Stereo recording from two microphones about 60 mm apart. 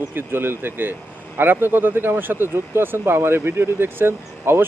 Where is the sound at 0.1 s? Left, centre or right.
Right.